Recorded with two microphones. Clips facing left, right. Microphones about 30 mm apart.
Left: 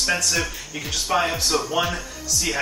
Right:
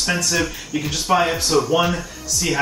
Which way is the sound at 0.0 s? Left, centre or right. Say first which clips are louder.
Right 2 dB; centre.